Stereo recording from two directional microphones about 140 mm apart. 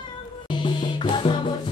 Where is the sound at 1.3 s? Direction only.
40° left (ahead or behind).